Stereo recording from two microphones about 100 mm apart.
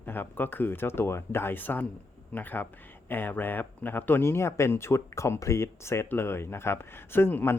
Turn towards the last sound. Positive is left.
turn(degrees=20)  # may be behind; listen again after turning